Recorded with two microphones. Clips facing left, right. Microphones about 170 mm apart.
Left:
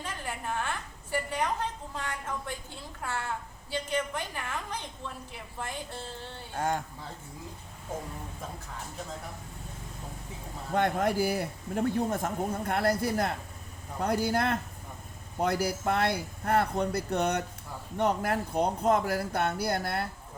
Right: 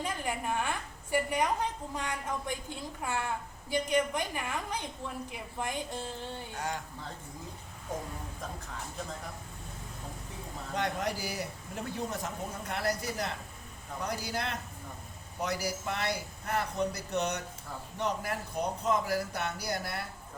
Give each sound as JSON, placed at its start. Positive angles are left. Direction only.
{"t": 0.0, "sound": "a woman's voice", "side_deg": -15}
{"t": 6.5, "sound": "a man's voice", "side_deg": 50}
{"t": 10.8, "sound": "a man's voice", "side_deg": 55}